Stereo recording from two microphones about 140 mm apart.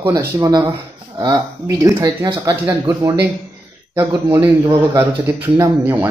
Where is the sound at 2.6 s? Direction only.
20° right (ahead or behind).